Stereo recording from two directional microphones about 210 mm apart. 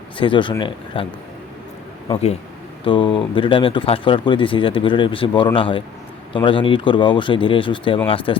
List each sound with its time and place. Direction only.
0.2 s speech: 25° left (ahead or behind)
2.1 s a man's voice: 30° left (ahead or behind)